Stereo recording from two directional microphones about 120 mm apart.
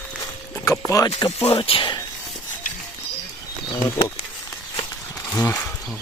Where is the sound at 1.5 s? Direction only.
50° left (ahead or behind).